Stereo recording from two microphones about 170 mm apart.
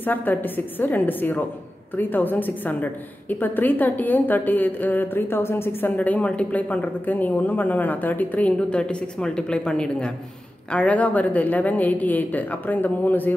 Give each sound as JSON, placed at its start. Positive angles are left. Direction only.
{"t": 0.0, "sound": "a woman's voice", "side_deg": 10}